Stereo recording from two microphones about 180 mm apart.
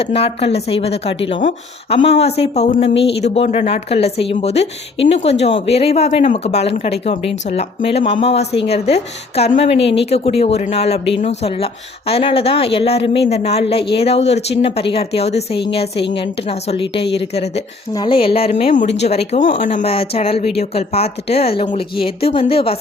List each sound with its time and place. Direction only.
0.0 s speech: 30° left (ahead or behind)
1.4 s speech: 45° left (ahead or behind)
2.0 s speech: 35° left (ahead or behind)